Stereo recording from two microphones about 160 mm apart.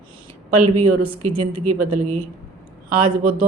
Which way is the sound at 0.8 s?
35° right (ahead or behind).